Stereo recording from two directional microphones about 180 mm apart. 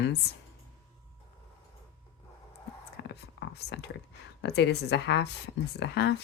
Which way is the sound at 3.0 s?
65° left (ahead or behind).